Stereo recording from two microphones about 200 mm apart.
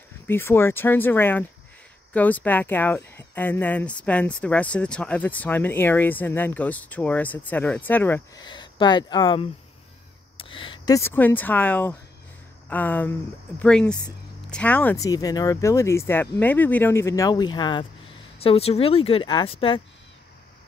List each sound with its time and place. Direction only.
0.3 s speech: 10° left (ahead or behind)
8.5 s speech: 20° left (ahead or behind)
10.4 s a sound: 25° left (ahead or behind)
11.0 s speech: 10° left (ahead or behind); by 19.8 s 25° left (ahead or behind)